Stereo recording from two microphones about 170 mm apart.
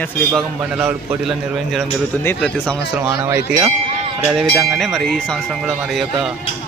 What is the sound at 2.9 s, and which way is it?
Speech, 15° right (ahead or behind).